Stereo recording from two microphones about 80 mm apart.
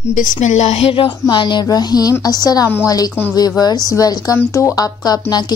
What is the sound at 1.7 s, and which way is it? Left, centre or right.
A woman's voice, left.